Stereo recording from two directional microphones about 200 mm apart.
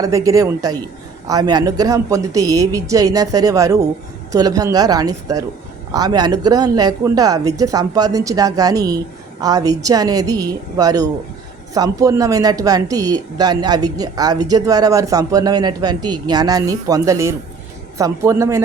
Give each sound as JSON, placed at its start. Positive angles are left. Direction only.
{"t": 0.0, "sound": "a woman's voice", "side_deg": -15}